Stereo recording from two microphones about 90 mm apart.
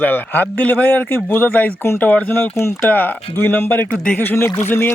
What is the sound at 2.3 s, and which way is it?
A man's voice, 25° left (ahead or behind).